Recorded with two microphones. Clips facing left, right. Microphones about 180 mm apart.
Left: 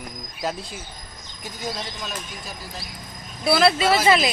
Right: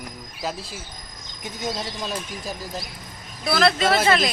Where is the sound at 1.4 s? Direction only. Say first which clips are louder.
Right 2 dB; 25° right (ahead or behind).